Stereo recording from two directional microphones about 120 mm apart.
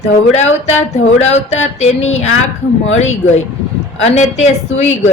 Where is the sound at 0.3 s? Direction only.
70° left (ahead or behind).